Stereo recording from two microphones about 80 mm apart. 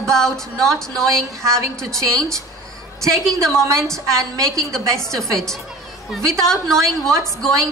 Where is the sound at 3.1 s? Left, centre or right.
Centre.